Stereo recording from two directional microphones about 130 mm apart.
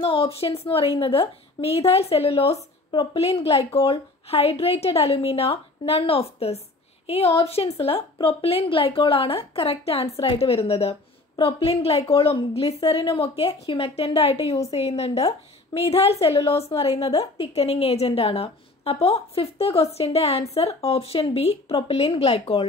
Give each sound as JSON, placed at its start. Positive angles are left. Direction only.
{"t": 0.0, "sound": "a woman's voice", "side_deg": 45}
{"t": 2.9, "sound": "a woman's voice", "side_deg": 40}
{"t": 3.3, "sound": "a woman's voice", "side_deg": 50}